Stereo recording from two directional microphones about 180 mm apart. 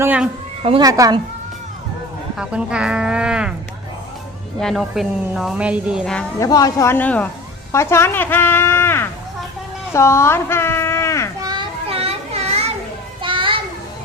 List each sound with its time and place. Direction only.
0.0 s speech: 10° right (ahead or behind)
0.8 s speech: 20° right (ahead or behind)
2.4 s speech: 5° right (ahead or behind)
4.6 s speech: centre (ahead or behind)
6.4 s speech: 20° left (ahead or behind)
7.7 s a sound: 15° left (ahead or behind)
11.3 s children playing: 25° right (ahead or behind)